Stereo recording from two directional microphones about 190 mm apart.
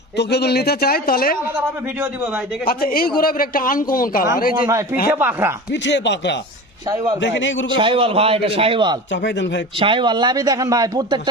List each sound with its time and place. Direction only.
0.2 s speech: 60° left (ahead or behind)
1.5 s a man's voice: 5° right (ahead or behind)
2.6 s a man's voice: 50° left (ahead or behind)
4.6 s a man's voice: 15° right (ahead or behind)
5.7 s speech: 65° left (ahead or behind)
7.8 s a man's voice: 30° right (ahead or behind)
9.2 s speech: 70° left (ahead or behind)
9.7 s a man's voice: 25° right (ahead or behind)